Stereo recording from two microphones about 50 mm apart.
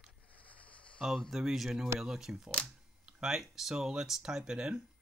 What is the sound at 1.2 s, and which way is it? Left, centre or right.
Speech, centre.